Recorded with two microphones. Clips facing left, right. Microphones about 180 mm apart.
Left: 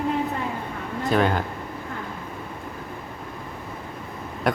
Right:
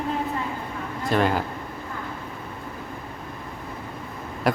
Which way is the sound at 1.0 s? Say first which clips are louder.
Left 1 dB; centre (ahead or behind).